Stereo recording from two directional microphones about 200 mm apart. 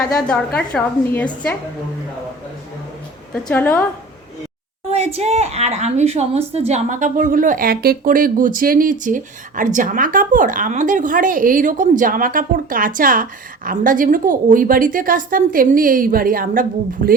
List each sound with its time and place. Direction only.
0.2 s a woman's voice: 5° left (ahead or behind)
3.3 s a woman's voice: 10° left (ahead or behind)
4.9 s a woman's voice: 30° right (ahead or behind)